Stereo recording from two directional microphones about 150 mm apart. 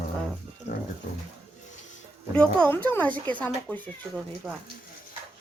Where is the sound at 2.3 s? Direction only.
10° left (ahead or behind).